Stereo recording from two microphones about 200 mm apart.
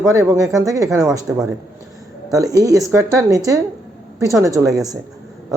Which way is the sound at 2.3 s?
15° right (ahead or behind).